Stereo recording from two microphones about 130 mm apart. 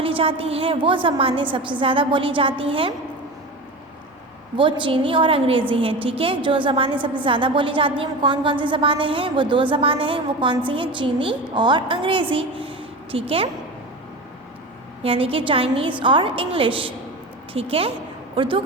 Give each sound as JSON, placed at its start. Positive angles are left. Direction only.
{"t": 0.0, "sound": "a woman's voice", "side_deg": -45}
{"t": 4.5, "sound": "a woman's voice", "side_deg": -40}
{"t": 15.0, "sound": "a woman's voice", "side_deg": -45}